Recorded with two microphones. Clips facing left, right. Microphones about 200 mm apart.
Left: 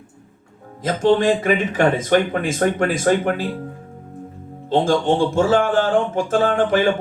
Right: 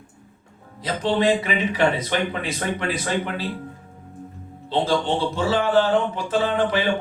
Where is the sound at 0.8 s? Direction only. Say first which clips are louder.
Left 5 dB; 50° left (ahead or behind).